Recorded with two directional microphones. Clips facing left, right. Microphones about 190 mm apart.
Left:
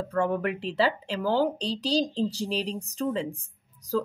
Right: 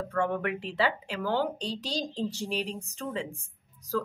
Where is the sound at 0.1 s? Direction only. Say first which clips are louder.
Left 3 dB; 35° left (ahead or behind).